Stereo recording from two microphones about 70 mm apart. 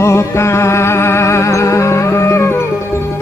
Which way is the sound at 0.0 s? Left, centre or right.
Left.